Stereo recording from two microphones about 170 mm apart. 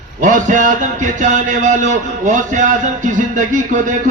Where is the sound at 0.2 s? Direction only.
50° right (ahead or behind).